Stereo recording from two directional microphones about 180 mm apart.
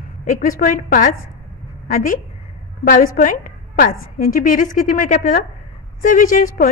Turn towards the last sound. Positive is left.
turn(degrees=50)  # may be behind; listen again after turning